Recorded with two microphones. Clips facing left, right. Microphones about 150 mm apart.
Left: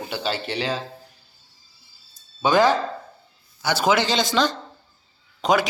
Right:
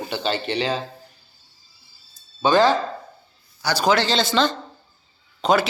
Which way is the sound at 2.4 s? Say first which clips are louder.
Right 1 dB; 15° left (ahead or behind).